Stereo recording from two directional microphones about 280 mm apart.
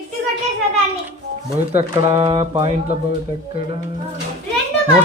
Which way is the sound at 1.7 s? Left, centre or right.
Centre.